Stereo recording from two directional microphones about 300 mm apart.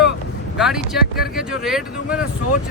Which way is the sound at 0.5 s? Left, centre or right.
Centre.